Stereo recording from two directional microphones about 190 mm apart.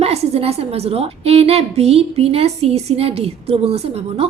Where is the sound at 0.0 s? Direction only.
35° right (ahead or behind).